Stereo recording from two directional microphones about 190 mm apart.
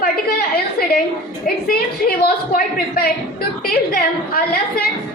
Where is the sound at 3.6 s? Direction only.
50° left (ahead or behind).